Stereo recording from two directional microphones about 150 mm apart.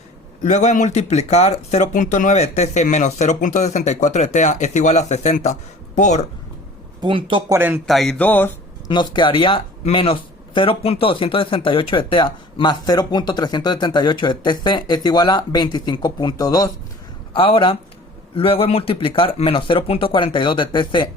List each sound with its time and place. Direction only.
0.4 s speech: 55° left (ahead or behind)
7.0 s speech: 35° right (ahead or behind)
7.5 s speech: 15° right (ahead or behind)
7.9 s a sound: centre (ahead or behind)
8.9 s speech: 30° left (ahead or behind)
17.3 s speech: 35° left (ahead or behind)